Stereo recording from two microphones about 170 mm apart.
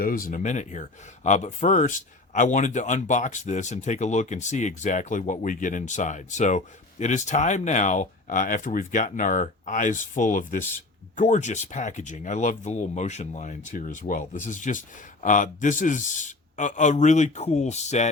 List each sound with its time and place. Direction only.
0.0 s speech: 55° left (ahead or behind)